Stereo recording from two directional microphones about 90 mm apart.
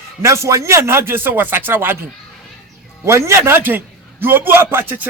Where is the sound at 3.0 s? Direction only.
30° right (ahead or behind).